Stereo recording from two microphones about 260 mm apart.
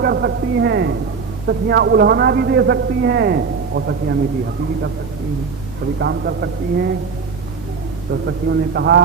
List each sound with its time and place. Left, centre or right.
0.0 s a man's voice: right
6.0 s a man's voice: right
8.1 s a man's voice: right